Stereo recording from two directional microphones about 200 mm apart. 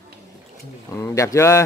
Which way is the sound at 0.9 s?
15° left (ahead or behind).